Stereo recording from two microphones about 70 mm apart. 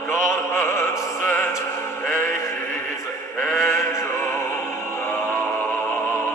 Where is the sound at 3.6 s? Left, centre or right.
Left.